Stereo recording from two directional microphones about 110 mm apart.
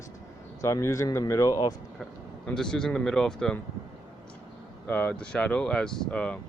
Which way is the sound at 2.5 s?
5° left (ahead or behind).